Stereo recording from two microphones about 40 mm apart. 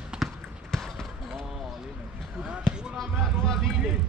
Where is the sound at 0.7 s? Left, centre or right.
Centre.